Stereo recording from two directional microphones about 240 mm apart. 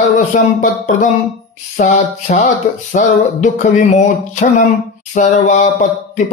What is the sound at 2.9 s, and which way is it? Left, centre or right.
Speech, left.